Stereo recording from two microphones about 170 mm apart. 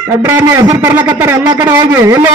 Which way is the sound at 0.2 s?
15° right (ahead or behind).